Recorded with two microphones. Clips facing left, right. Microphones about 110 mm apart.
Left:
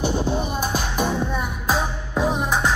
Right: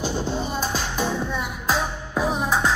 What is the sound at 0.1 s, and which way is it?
Music, 15° left (ahead or behind).